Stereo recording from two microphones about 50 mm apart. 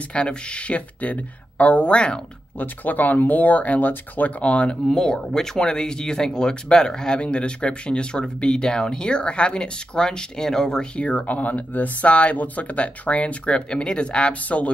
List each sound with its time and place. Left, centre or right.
0.1 s speech: centre
2.6 s speech: left
4.9 s speech: centre
11.0 s speech: left